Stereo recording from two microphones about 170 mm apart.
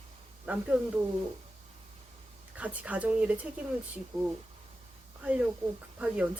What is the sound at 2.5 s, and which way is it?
Speech, 10° right (ahead or behind).